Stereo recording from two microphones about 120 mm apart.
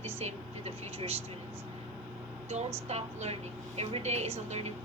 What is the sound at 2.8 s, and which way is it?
Speech, 65° right (ahead or behind).